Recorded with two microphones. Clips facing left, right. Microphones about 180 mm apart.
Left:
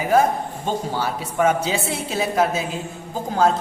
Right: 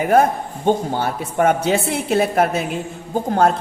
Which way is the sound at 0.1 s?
55° right (ahead or behind).